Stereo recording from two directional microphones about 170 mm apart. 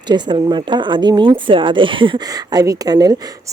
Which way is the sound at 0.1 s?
25° right (ahead or behind).